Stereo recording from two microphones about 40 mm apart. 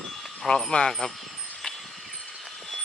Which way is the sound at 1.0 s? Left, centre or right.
Left.